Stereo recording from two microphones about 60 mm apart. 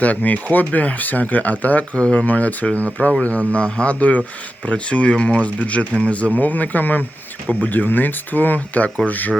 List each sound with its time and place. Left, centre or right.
0.0 s speech: left